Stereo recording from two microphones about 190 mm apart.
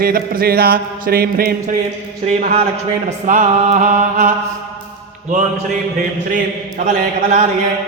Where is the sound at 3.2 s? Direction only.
40° right (ahead or behind).